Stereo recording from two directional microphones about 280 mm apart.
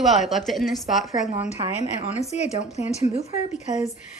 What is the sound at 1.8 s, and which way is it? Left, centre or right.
Speech, left.